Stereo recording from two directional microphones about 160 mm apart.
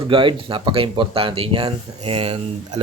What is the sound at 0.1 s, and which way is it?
Speech, 35° right (ahead or behind).